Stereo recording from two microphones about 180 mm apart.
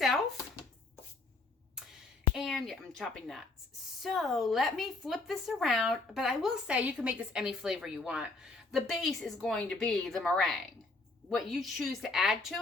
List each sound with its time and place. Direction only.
2.3 s speech: centre (ahead or behind)